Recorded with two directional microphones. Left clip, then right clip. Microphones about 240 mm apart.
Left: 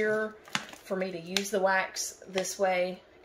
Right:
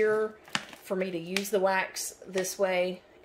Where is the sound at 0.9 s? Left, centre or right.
Right.